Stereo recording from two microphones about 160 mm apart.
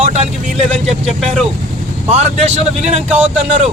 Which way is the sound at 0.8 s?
Centre (ahead or behind).